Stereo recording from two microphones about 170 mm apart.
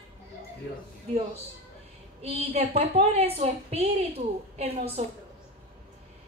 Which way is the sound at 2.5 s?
35° right (ahead or behind).